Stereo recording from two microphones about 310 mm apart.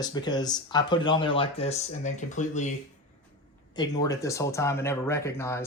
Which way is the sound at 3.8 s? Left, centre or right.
Centre.